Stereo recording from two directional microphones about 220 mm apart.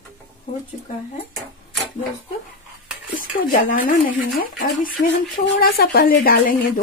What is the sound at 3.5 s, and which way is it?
Speech, 40° left (ahead or behind).